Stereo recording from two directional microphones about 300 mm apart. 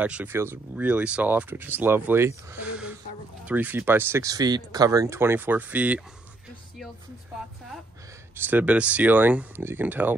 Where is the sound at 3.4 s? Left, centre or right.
Centre.